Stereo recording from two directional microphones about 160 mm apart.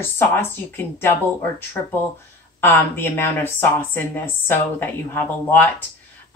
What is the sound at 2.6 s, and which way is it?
Speech, 15° left (ahead or behind).